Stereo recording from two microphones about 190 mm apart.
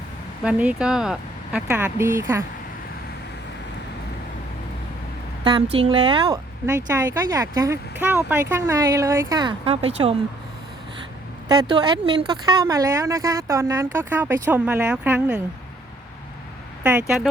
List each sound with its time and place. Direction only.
0.4 s speech: 5° right (ahead or behind)
5.4 s a sound: 25° right (ahead or behind)
5.7 s speech: 30° right (ahead or behind)
7.1 s speech: 15° right (ahead or behind); by 10.2 s 30° right (ahead or behind)
11.4 s speech: 20° right (ahead or behind)
16.8 s speech: 10° right (ahead or behind)